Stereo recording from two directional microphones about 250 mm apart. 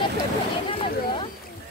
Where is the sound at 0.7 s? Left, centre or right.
Left.